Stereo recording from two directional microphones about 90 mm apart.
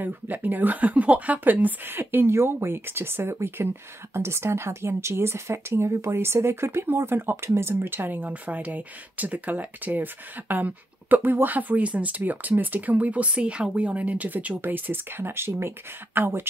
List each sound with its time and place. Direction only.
0.0 s speech: 20° right (ahead or behind)